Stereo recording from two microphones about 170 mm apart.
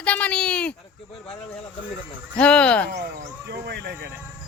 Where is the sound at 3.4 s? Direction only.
75° right (ahead or behind).